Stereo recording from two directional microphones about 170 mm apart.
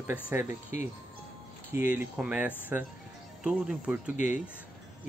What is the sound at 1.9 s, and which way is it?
Speech, 5° right (ahead or behind).